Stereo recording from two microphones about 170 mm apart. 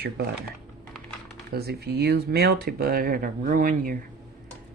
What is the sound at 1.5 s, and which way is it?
Speech, 70° right (ahead or behind).